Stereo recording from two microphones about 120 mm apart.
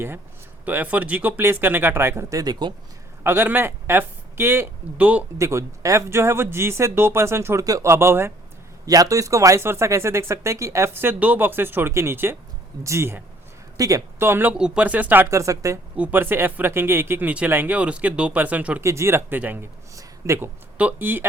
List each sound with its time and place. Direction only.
0.6 s speech: 15° right (ahead or behind); by 2.7 s 35° right (ahead or behind)
3.2 s speech: 15° right (ahead or behind)
5.4 s speech: 25° right (ahead or behind)
14.6 s speech: 10° right (ahead or behind); by 15.8 s 25° right (ahead or behind)
16.0 s speech: 15° right (ahead or behind)
18.8 s speech: 25° right (ahead or behind)
20.0 s a sound: 25° right (ahead or behind)
20.7 s speech: 15° right (ahead or behind)